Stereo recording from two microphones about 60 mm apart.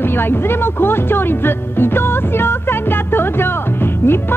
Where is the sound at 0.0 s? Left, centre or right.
Left.